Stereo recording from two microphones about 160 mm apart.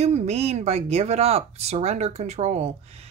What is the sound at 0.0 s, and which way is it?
Speech, 40° right (ahead or behind).